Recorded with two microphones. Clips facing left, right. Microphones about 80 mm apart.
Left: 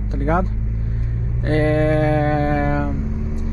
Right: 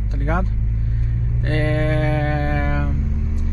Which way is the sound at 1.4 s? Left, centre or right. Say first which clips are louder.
Left 5 dB; left.